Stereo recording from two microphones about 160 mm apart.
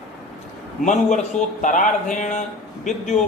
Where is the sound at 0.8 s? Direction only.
50° left (ahead or behind).